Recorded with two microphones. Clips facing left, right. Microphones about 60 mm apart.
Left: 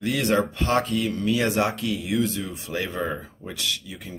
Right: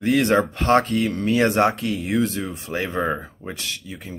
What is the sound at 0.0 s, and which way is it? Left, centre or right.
Speech, right.